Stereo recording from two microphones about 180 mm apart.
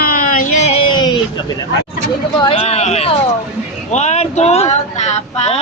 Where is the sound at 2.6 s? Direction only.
35° left (ahead or behind).